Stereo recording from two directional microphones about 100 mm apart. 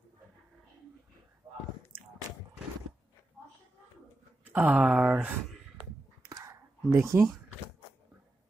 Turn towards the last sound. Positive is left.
turn(degrees=-30)  # may be behind; listen again after turning